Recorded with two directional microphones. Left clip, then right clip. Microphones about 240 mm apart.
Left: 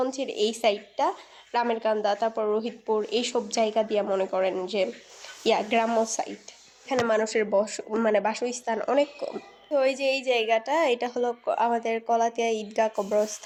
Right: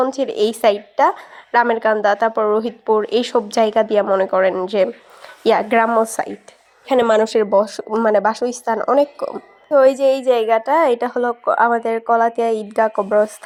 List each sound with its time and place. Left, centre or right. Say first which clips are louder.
0.0 s speech: right 9 dB; right
6.8 s speech: right 10 dB; right; by 13.3 s centre